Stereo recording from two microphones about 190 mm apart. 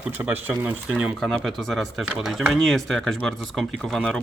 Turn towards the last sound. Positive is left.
turn(degrees=0)  # may be behind; listen again after turning